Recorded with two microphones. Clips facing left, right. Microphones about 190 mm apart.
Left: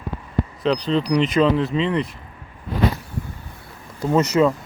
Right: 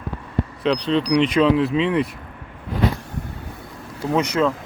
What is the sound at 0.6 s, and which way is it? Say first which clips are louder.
Speech: right 1 dB; centre (ahead or behind).